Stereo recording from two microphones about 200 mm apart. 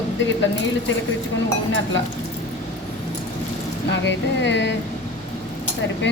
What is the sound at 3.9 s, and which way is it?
Speech, 65° left (ahead or behind).